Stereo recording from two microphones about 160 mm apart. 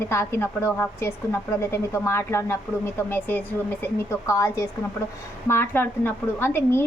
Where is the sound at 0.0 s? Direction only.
15° left (ahead or behind).